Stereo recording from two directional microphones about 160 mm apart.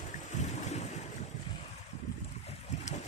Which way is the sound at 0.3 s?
45° left (ahead or behind).